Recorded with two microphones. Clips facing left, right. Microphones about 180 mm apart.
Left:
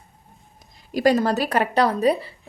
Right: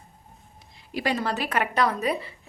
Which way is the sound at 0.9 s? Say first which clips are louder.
Left 8 dB; 40° left (ahead or behind).